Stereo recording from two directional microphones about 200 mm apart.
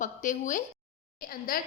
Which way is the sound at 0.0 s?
40° left (ahead or behind).